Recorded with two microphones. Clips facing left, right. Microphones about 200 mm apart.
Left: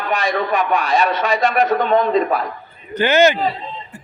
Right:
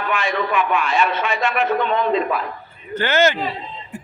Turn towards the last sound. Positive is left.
turn(degrees=-15)  # may be behind; listen again after turning